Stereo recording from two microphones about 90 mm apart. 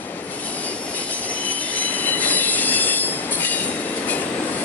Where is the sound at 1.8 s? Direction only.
20° left (ahead or behind).